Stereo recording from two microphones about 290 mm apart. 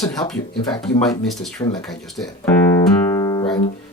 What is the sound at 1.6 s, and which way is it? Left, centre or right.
Speech, left.